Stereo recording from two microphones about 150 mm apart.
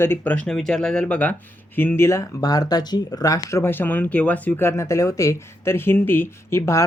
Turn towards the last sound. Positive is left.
turn(degrees=20)  # may be behind; listen again after turning